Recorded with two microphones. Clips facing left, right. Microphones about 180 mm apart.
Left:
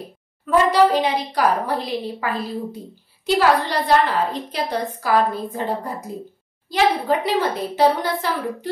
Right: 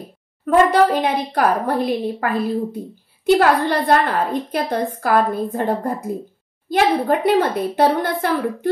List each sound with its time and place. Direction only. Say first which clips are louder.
0.5 s a woman's voice: right 2 dB; 50° right (ahead or behind)